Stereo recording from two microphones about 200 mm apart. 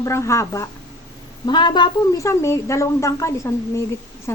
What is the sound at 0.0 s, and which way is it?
A woman's voice, 15° left (ahead or behind).